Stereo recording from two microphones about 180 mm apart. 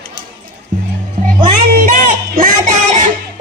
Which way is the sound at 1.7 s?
50° right (ahead or behind).